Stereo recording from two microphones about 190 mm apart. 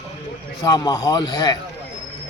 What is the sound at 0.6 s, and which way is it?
A man's voice, 20° left (ahead or behind).